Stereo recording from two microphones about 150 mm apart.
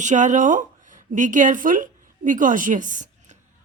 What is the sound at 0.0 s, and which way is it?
Speech, 55° right (ahead or behind).